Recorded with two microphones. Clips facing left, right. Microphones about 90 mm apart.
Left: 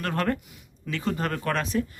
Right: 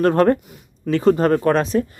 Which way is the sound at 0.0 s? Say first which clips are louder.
Right 12 dB; 30° right (ahead or behind).